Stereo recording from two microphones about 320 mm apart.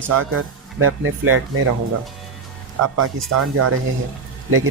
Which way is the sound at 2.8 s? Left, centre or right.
Right.